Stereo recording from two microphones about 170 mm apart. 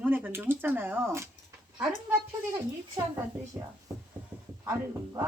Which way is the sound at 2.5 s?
20° right (ahead or behind).